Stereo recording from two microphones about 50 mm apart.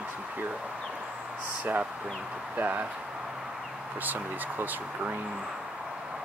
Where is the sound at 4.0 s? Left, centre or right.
Right.